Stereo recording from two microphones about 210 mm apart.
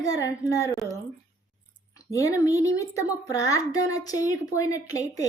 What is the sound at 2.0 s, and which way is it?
A child's voice, 15° left (ahead or behind).